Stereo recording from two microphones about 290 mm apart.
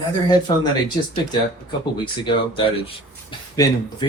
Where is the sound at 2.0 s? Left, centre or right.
Centre.